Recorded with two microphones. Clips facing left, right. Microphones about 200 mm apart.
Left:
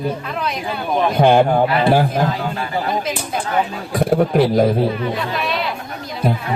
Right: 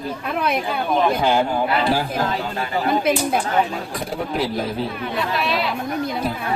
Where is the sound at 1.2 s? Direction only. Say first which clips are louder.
Left 6 dB; 60° left (ahead or behind).